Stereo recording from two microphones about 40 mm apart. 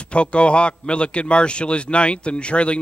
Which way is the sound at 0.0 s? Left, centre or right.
Left.